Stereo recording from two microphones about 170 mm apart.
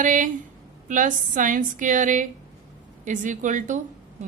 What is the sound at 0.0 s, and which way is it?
A woman's voice, 50° right (ahead or behind).